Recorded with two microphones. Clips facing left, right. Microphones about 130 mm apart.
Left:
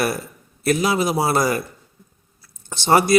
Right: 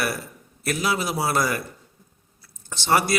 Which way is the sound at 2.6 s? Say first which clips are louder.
Left 5 dB; 20° left (ahead or behind).